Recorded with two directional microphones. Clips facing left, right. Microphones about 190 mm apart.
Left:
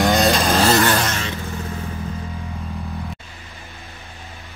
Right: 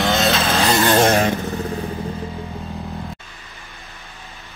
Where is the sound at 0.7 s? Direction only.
20° right (ahead or behind).